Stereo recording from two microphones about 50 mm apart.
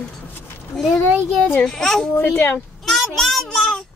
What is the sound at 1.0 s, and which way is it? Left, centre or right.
Speech, left.